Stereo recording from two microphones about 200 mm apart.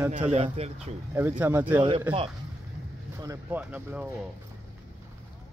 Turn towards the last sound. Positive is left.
turn(degrees=-5)  # may be behind; listen again after turning